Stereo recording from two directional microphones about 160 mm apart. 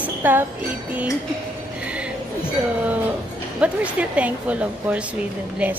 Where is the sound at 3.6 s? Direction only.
10° right (ahead or behind).